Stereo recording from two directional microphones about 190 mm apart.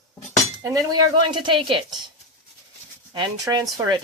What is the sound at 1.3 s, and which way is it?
Speech, 25° right (ahead or behind).